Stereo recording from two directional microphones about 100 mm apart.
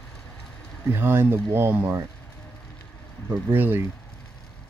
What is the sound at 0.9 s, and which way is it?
Speech, 20° right (ahead or behind).